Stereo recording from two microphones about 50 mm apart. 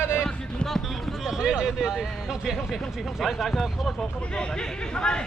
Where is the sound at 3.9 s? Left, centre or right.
Centre.